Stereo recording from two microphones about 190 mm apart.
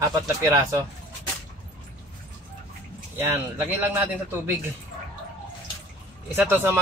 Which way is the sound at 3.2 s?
10° right (ahead or behind).